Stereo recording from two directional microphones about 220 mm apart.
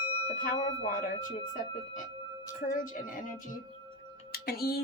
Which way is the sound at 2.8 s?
40° left (ahead or behind).